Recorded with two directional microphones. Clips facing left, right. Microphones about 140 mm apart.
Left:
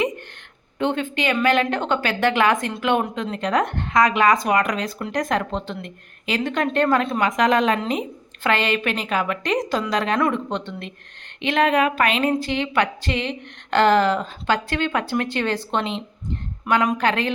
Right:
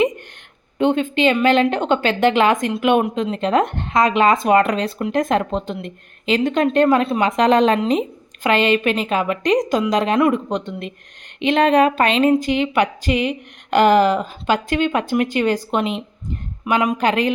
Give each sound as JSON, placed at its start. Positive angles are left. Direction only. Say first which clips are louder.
{"t": 0.8, "sound": "a woman's voice", "louder": "right 6 dB", "side_deg": -20}
{"t": 8.4, "sound": "a woman's voice", "louder": "right 5 dB", "side_deg": -20}
{"t": 11.6, "sound": "speech", "louder": "right 4 dB", "side_deg": -35}